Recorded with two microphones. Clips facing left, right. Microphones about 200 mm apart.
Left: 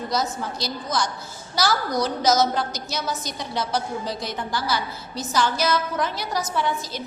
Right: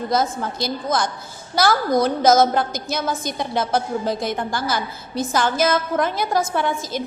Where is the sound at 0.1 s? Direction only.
50° right (ahead or behind).